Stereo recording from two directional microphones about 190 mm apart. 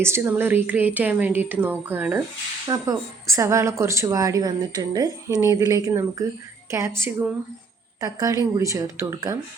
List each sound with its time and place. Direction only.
0.0 s a woman's voice: 10° right (ahead or behind)